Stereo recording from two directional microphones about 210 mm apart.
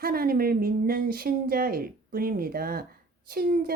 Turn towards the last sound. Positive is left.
turn(degrees=-45)  # may be behind; listen again after turning